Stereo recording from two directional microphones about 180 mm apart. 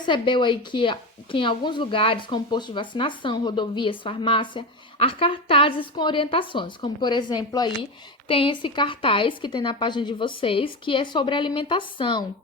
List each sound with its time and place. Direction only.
0.0 s speech: 25° left (ahead or behind)